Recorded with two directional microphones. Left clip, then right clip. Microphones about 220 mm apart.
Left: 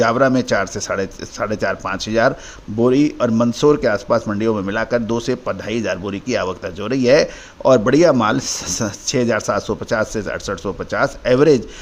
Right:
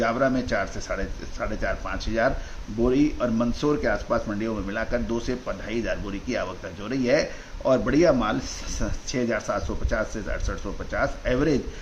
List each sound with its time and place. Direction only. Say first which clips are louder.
0.0 s a man's voice: left 8 dB; 50° left (ahead or behind)